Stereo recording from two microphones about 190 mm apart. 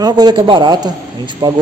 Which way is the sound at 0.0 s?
20° right (ahead or behind).